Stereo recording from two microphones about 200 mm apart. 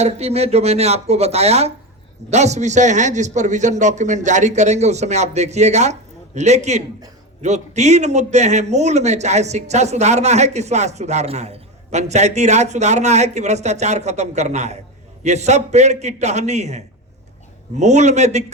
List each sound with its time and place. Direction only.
0.0 s a man's voice: 30° right (ahead or behind)